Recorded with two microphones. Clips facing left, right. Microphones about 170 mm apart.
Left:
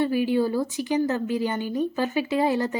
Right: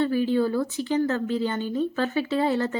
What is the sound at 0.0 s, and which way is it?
A woman's voice, 15° left (ahead or behind).